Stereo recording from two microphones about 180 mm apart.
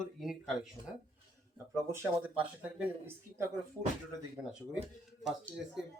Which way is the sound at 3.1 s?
15° right (ahead or behind).